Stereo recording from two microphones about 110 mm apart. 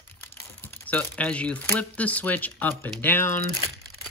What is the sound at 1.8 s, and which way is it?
Speech, 15° left (ahead or behind).